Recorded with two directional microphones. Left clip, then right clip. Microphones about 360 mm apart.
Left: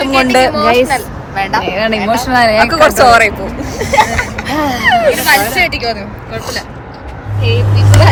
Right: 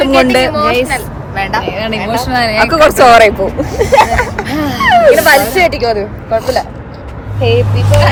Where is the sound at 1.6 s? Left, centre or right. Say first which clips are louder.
Left 3 dB; centre.